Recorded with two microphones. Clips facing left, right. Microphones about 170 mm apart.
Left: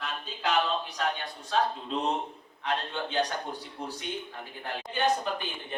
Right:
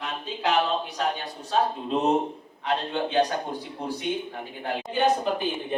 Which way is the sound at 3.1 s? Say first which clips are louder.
Right 6 dB; 10° right (ahead or behind).